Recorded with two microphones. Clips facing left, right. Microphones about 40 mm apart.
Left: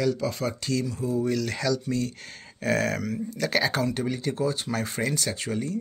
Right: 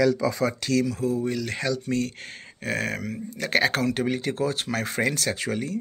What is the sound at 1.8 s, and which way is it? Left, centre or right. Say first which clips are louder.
Speech: right 2 dB; right.